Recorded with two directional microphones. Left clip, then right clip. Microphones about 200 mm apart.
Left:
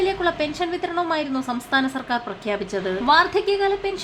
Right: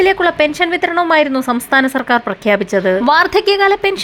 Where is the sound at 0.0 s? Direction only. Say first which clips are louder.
Right 10 dB; 35° right (ahead or behind).